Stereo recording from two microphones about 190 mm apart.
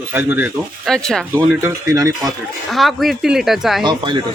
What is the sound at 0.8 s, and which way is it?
Speech, 5° left (ahead or behind).